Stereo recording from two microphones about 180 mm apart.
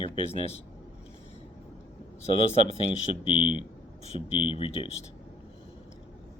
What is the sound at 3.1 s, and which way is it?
Speech, 30° left (ahead or behind).